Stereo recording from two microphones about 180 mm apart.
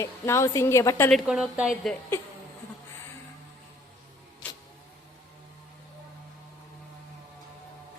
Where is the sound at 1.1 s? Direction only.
5° right (ahead or behind).